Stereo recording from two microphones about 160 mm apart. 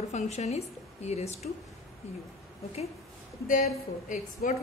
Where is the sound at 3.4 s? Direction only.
55° left (ahead or behind).